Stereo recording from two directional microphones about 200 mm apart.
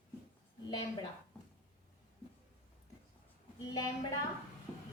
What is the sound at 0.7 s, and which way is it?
Speech, 20° left (ahead or behind).